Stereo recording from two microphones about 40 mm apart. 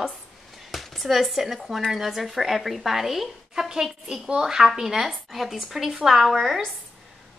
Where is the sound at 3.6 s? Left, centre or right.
Centre.